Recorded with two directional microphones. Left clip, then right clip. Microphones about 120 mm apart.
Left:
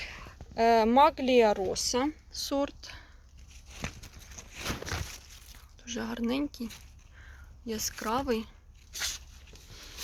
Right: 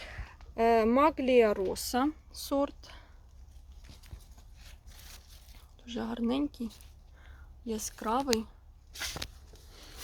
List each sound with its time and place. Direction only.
0.0 s speech: 35° right (ahead or behind)
2.3 s speech: 15° right (ahead or behind)
5.8 s speech: centre (ahead or behind)
7.7 s speech: centre (ahead or behind)
8.9 s walk: 80° left